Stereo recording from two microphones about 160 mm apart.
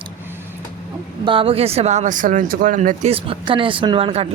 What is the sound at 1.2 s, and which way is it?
Speech, 35° right (ahead or behind).